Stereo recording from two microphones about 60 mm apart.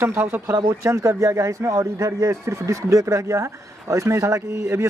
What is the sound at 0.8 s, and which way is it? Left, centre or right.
Speech, right.